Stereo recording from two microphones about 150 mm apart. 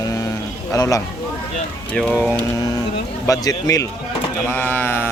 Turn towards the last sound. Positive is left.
turn(degrees=15)  # may be behind; listen again after turning